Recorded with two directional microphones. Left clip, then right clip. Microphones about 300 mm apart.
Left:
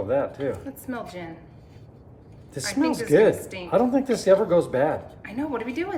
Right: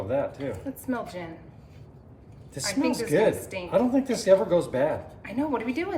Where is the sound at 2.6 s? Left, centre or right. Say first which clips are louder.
Left 2 dB; centre.